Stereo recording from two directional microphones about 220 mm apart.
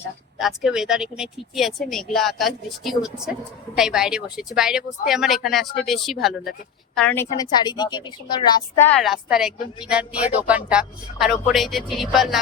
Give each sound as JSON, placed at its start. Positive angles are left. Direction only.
{"t": 0.3, "sound": "a woman's voice", "side_deg": 0}
{"t": 9.0, "sound": "speech", "side_deg": 0}